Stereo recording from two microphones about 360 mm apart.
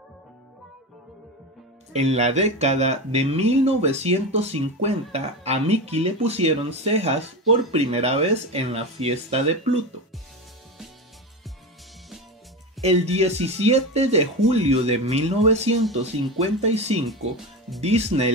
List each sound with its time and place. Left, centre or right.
1.9 s speech: centre
12.8 s speech: centre